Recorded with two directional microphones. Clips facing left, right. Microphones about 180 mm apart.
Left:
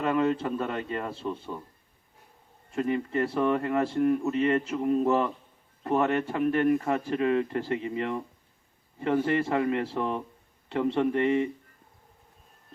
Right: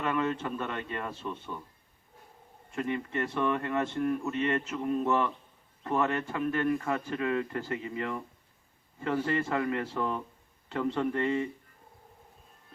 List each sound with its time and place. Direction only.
0.0 s speech: 30° left (ahead or behind)
2.7 s a man's voice: 30° left (ahead or behind)